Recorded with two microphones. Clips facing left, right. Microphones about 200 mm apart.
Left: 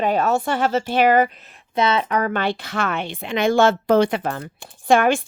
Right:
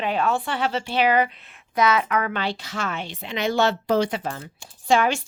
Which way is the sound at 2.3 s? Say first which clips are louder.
Left 5 dB; 55° left (ahead or behind).